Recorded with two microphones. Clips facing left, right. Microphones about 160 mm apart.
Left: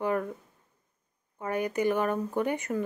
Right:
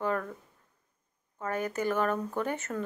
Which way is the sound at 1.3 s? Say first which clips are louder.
Left 3 dB; 15° left (ahead or behind).